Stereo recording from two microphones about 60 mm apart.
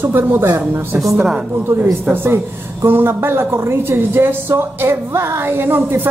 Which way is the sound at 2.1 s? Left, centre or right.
Right.